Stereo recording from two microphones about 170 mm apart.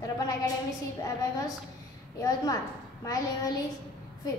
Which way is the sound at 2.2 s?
20° left (ahead or behind).